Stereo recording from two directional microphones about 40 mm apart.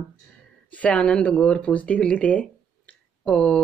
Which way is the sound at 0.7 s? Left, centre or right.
Left.